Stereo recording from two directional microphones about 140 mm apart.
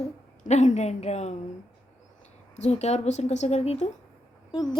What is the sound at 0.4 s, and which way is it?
Speech, 55° left (ahead or behind).